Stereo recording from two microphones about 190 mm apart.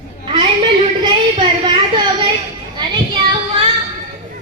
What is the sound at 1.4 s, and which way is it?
Speech, 25° right (ahead or behind).